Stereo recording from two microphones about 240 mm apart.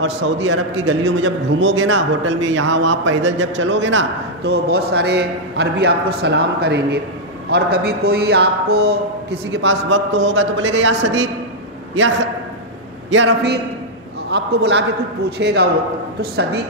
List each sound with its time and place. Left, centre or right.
0.0 s a man's voice: right
13.1 s a man's voice: right